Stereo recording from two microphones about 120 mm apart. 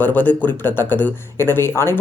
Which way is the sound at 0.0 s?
15° left (ahead or behind).